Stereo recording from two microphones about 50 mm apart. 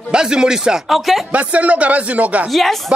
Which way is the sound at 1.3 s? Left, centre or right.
Right.